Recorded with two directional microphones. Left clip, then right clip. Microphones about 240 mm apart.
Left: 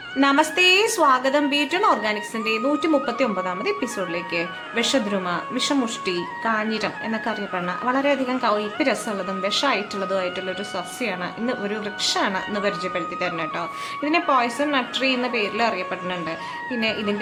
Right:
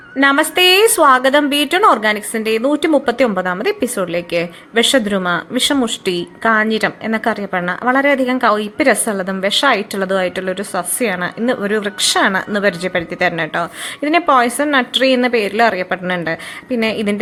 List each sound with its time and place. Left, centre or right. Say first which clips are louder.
0.2 s a woman's voice: right 6 dB; centre